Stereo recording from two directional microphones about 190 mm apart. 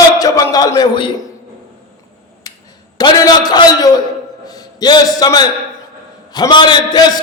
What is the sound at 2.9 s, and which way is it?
A man's voice, 20° left (ahead or behind).